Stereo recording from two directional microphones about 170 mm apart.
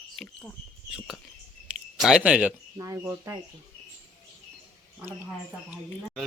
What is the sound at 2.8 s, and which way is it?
Speech, 20° right (ahead or behind).